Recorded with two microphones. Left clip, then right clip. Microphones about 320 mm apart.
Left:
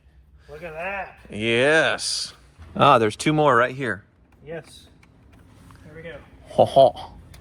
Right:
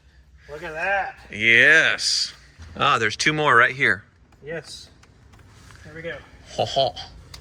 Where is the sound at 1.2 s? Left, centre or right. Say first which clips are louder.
Right 5 dB; centre.